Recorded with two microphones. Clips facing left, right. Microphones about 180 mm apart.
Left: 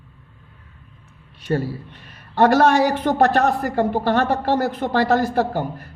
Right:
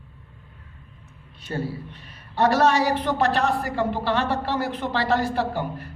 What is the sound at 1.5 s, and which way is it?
A man's voice, 65° left (ahead or behind).